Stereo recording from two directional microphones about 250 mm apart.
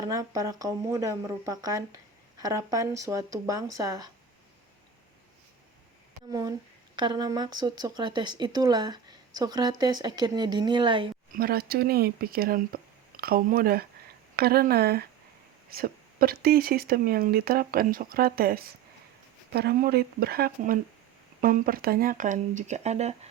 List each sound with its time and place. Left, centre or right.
0.0 s speech: centre
6.9 s speech: centre
11.3 s speech: right